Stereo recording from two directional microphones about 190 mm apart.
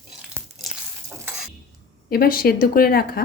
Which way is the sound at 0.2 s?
5° right (ahead or behind).